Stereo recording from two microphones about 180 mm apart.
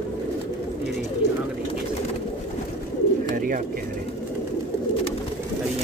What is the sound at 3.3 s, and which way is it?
Speech, 50° right (ahead or behind).